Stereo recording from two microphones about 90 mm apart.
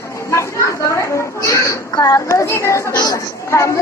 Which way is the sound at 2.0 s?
35° left (ahead or behind).